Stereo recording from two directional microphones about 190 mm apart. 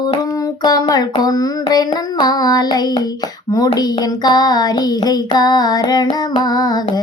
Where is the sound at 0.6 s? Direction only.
20° left (ahead or behind).